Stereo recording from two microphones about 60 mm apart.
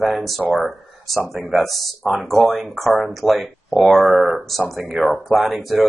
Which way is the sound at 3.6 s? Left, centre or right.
Centre.